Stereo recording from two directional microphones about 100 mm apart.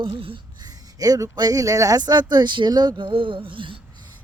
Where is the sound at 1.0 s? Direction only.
40° right (ahead or behind).